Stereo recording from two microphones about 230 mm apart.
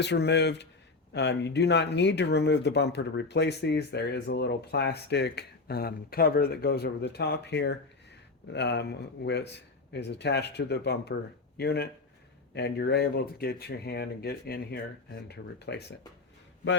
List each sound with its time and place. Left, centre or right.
0.0 s speech: left